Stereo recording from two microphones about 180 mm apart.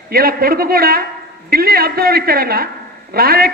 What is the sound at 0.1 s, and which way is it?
A man's voice, 55° right (ahead or behind).